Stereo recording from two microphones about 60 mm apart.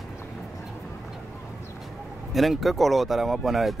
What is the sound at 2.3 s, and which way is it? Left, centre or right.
Speech, centre.